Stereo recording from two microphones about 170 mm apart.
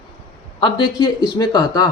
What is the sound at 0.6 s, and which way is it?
Speech, 25° left (ahead or behind).